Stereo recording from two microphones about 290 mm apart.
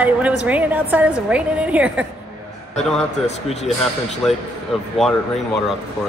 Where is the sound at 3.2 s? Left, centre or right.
Left.